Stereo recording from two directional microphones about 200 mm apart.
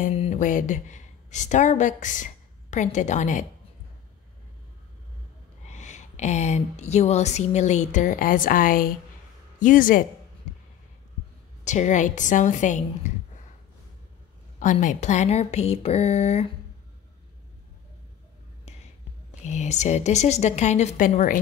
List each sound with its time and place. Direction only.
0.0 s a woman's voice: 35° left (ahead or behind)
5.7 s speech: 35° left (ahead or behind)
11.6 s speech: 35° left (ahead or behind)
14.6 s speech: 40° left (ahead or behind)
18.7 s whispering: 35° left (ahead or behind)
19.4 s speech: 35° left (ahead or behind)